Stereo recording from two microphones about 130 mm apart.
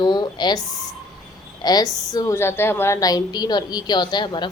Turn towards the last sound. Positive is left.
turn(degrees=35)  # may be behind; listen again after turning